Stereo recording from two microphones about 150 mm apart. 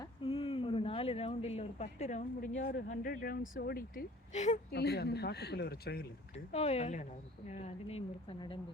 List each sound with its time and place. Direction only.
0.0 s a sound: 35° left (ahead or behind); by 2.5 s 55° left (ahead or behind)
3.0 s speech: 75° left (ahead or behind); by 4.0 s 90° left
4.3 s a woman's voice: 50° left (ahead or behind)
4.7 s speech: 90° left
6.3 s a woman's voice: 45° left (ahead or behind)